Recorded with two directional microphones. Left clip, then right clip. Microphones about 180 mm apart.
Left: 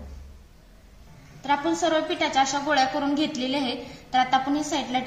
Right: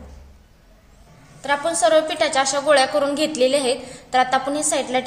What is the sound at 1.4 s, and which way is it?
A woman's voice, 50° right (ahead or behind).